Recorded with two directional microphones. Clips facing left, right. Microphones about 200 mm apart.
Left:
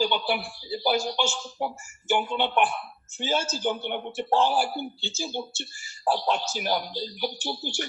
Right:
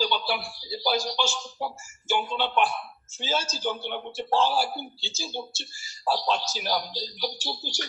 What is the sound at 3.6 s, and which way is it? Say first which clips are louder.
Speech: left 2 dB; 15° left (ahead or behind).